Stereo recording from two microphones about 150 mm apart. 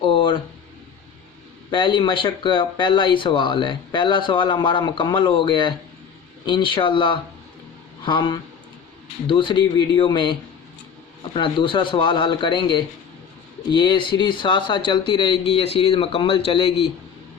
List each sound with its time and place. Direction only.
0.0 s a sound: 35° left (ahead or behind)
1.7 s speech: 35° left (ahead or behind)
11.3 s speech: 35° left (ahead or behind)